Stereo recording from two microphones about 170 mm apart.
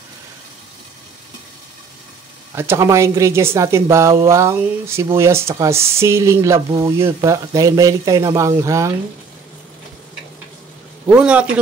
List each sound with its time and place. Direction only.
2.5 s a woman's voice: 15° right (ahead or behind)
11.1 s a woman's voice: 5° right (ahead or behind)